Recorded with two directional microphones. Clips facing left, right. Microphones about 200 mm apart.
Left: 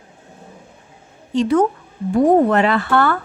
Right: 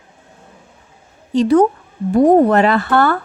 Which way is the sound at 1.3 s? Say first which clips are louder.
Right 4 dB; 35° right (ahead or behind).